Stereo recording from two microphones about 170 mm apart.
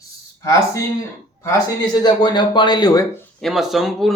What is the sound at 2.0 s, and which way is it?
Speech, 25° left (ahead or behind).